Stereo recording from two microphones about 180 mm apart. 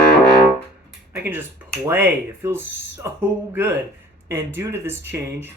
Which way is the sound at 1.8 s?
10° right (ahead or behind).